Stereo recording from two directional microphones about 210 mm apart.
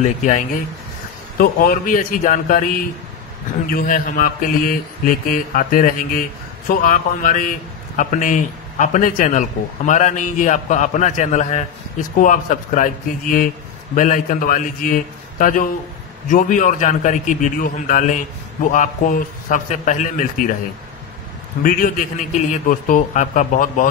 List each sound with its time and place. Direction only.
0.0 s a man's voice: 35° left (ahead or behind)
1.4 s a man's voice: 40° left (ahead or behind)
3.7 s a man's voice: 40° left (ahead or behind)
21.6 s a man's voice: 40° left (ahead or behind)